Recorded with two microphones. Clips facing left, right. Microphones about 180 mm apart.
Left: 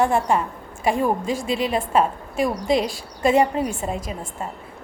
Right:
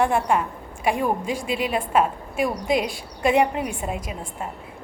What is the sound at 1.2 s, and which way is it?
Speech, 45° left (ahead or behind).